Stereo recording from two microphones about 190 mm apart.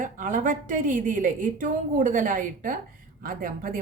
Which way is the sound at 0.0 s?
45° right (ahead or behind).